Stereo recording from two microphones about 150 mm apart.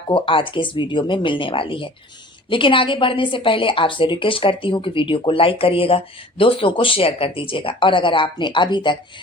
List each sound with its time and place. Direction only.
0.1 s a woman's voice: 35° left (ahead or behind)